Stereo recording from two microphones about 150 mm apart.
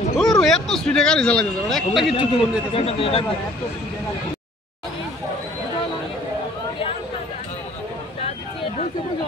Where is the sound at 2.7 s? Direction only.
40° left (ahead or behind).